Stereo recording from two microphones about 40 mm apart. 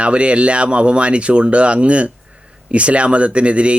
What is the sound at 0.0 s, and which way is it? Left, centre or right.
Speech, right.